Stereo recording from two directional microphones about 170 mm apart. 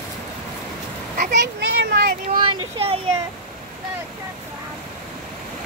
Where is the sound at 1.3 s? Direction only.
75° right (ahead or behind).